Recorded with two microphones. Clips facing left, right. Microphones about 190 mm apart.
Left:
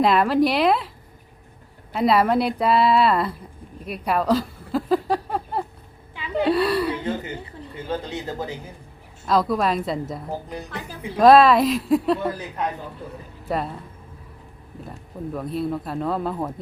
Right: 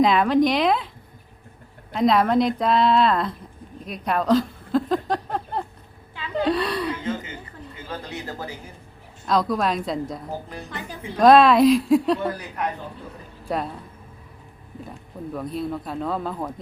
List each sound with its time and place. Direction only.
0.0 s speech: 5° left (ahead or behind)
1.9 s speech: 5° left (ahead or behind)
3.8 s a sound: 5° left (ahead or behind)
6.3 s speech: 5° left (ahead or behind)
7.9 s speech: 20° left (ahead or behind)
9.2 s speech: 5° left (ahead or behind)
13.5 s speech: centre (ahead or behind)
14.8 s speech: centre (ahead or behind)